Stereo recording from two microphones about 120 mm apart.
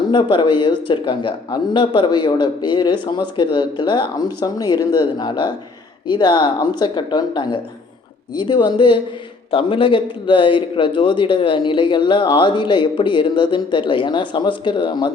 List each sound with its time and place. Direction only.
0.1 s a man's voice: 40° left (ahead or behind)